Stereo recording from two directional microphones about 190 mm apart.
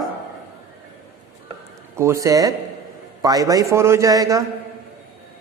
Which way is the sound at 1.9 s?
15° right (ahead or behind).